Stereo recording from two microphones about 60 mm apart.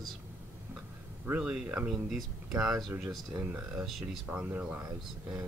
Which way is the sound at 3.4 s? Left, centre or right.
Right.